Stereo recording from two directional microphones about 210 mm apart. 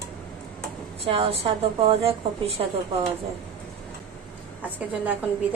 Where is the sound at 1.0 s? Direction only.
25° right (ahead or behind).